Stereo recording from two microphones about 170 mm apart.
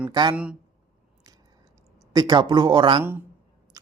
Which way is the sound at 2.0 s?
25° right (ahead or behind).